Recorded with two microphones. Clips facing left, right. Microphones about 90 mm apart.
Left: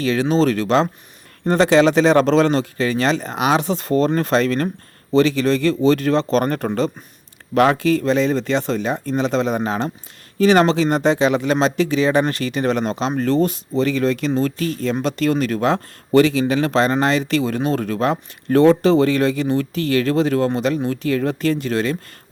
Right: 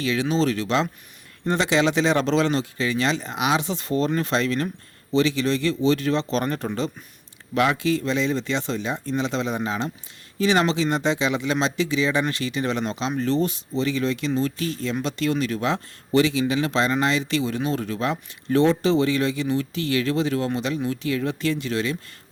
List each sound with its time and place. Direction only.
0.0 s speech: 40° left (ahead or behind)